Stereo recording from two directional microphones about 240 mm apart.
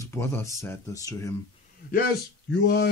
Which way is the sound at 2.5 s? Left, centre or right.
Left.